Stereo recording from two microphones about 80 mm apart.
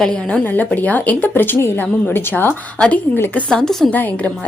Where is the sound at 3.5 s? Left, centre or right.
Centre.